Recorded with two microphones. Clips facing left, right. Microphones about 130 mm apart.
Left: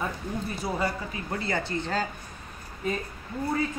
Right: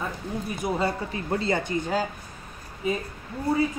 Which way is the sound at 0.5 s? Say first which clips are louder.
Right 4 dB; 20° right (ahead or behind).